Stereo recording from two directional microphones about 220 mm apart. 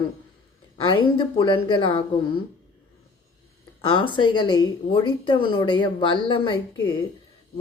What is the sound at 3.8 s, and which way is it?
Speech, 25° left (ahead or behind).